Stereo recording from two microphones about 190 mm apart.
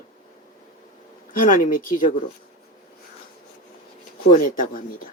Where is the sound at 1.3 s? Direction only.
45° left (ahead or behind).